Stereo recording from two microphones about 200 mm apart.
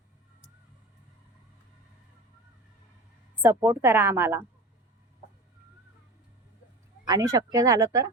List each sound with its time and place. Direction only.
3.4 s a woman's voice: 10° right (ahead or behind)
7.1 s a woman's voice: 15° right (ahead or behind)